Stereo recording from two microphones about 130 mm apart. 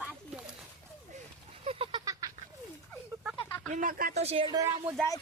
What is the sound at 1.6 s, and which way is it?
Goat, 45° right (ahead or behind).